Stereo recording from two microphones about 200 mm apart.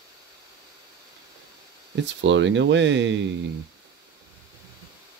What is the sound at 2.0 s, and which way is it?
Speech, 65° right (ahead or behind).